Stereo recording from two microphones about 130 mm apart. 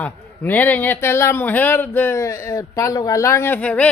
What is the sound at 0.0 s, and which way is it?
A man's voice, 15° left (ahead or behind).